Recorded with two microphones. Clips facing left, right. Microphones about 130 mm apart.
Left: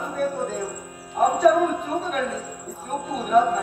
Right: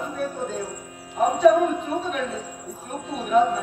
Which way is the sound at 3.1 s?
45° left (ahead or behind).